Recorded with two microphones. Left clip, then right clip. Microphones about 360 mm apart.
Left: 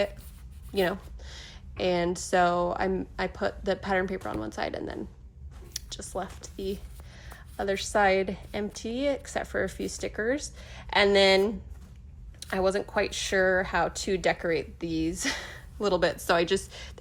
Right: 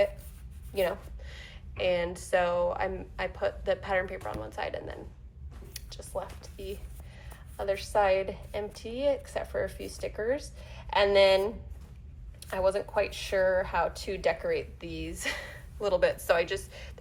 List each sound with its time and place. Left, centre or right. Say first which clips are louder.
0.7 s a woman's voice: left 2 dB; centre
12.5 s speech: left 1 dB; left